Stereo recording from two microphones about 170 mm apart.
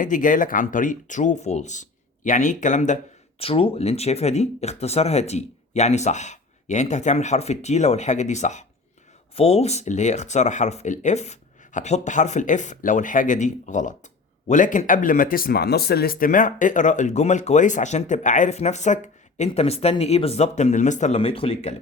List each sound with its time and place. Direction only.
0.0 s speech: 50° left (ahead or behind)